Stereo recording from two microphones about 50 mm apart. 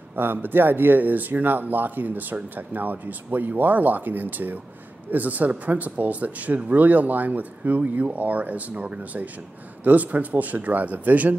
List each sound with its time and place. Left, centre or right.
0.1 s speech: right